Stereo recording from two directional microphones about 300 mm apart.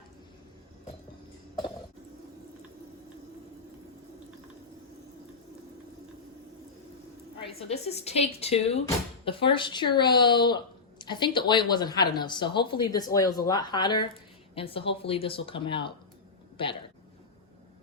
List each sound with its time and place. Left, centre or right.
7.4 s a woman's voice: left